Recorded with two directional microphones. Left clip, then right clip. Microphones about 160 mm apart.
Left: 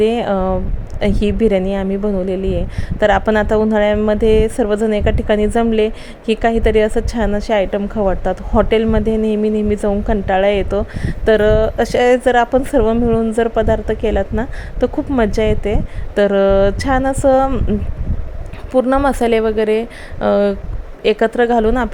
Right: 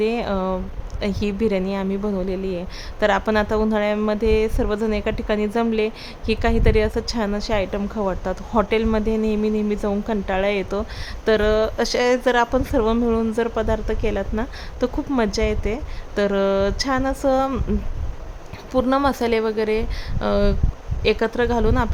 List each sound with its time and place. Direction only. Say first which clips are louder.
0.0 s a woman's voice: left 7 dB; 20° left (ahead or behind)
18.7 s a woman's voice: left 5 dB; 10° left (ahead or behind)